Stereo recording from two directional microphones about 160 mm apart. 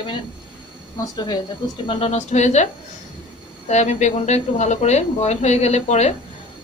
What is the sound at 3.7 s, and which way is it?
Speech, 45° left (ahead or behind).